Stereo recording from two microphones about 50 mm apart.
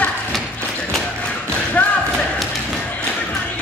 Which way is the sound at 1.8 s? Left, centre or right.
Left.